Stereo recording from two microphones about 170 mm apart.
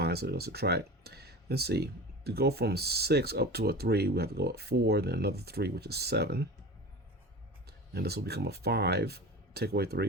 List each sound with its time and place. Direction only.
0.0 s speech: 70° right (ahead or behind)
7.7 s speech: 70° right (ahead or behind)